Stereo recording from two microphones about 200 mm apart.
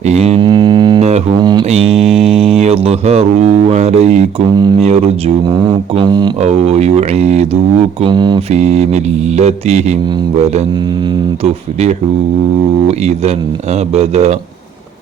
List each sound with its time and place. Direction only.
0.0 s mantra: 30° right (ahead or behind)
1.4 s a sound: 20° right (ahead or behind)
2.0 s mantra: centre (ahead or behind)
2.6 s speech: 30° right (ahead or behind)
6.4 s speech: 35° right (ahead or behind)
12.9 s speech: 30° right (ahead or behind)